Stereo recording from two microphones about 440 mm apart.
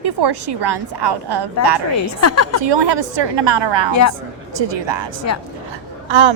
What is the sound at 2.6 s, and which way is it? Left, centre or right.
Speech, right.